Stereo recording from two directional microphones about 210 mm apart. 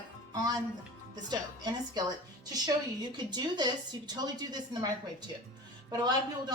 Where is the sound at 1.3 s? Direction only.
20° right (ahead or behind).